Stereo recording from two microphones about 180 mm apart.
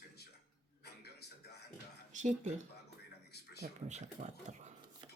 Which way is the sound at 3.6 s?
40° right (ahead or behind).